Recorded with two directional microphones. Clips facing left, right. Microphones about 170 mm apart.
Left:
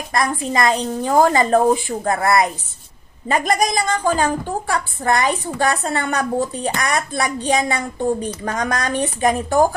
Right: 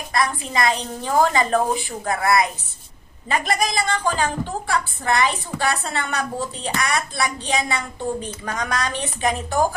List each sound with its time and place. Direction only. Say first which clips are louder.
0.1 s a woman's voice: left 3 dB; 45° left (ahead or behind)